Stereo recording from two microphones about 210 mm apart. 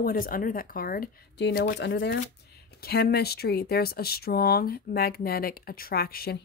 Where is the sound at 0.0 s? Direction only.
45° left (ahead or behind); by 2.0 s 60° left (ahead or behind).